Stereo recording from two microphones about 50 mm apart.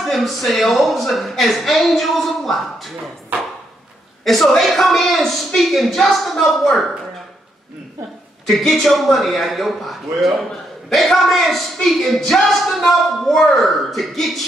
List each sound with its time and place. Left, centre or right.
0.0 s speech: centre
3.3 s chopping: right
4.2 s speech: centre
8.5 s speech: centre